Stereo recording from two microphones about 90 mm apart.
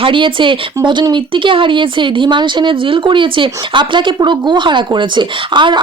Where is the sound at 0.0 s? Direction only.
70° right (ahead or behind).